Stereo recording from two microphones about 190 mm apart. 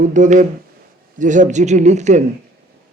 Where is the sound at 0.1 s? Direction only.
40° right (ahead or behind).